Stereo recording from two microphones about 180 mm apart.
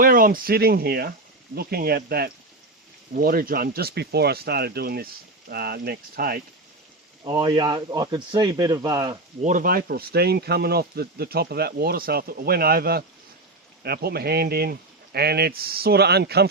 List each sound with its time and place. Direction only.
0.0 s speech: 50° right (ahead or behind)
7.3 s speech: 25° right (ahead or behind)
9.4 s speech: 45° right (ahead or behind); by 16.5 s 65° right (ahead or behind)